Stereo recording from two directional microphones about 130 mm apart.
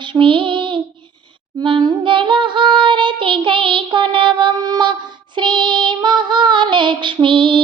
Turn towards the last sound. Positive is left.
turn(degrees=-40)  # may be behind; listen again after turning